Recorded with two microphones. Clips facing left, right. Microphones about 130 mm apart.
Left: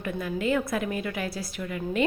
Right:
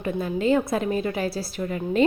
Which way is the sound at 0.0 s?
30° right (ahead or behind).